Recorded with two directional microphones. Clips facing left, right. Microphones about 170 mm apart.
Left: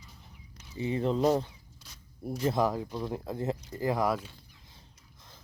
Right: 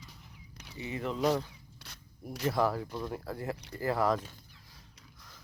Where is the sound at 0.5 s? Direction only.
65° right (ahead or behind).